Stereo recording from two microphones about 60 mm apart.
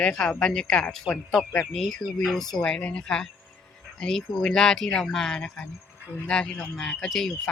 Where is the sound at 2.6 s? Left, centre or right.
Centre.